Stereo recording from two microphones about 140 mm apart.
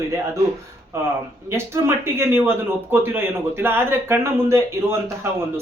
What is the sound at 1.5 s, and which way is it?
A man's voice, 20° right (ahead or behind).